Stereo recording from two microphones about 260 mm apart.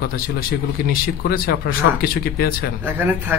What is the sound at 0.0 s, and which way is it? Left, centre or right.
Speech, left.